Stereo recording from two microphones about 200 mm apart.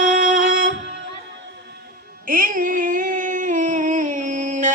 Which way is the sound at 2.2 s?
45° right (ahead or behind).